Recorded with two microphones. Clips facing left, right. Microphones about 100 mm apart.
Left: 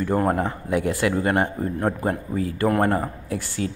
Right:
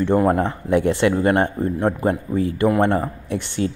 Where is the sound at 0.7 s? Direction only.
30° right (ahead or behind).